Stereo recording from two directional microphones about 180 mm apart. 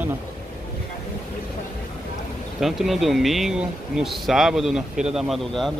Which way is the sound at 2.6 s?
Centre (ahead or behind).